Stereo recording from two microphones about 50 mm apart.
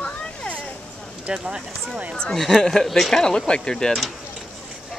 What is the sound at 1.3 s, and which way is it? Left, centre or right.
Speech, centre.